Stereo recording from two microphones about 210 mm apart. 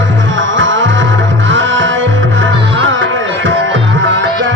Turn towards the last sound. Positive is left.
turn(degrees=-65)  # may be behind; listen again after turning